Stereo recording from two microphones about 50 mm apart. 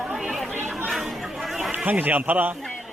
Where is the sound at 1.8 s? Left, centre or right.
Right.